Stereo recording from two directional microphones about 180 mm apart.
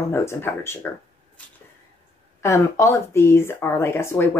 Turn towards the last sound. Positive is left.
turn(degrees=15)  # may be behind; listen again after turning